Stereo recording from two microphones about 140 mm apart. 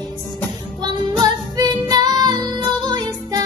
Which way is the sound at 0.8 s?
30° right (ahead or behind).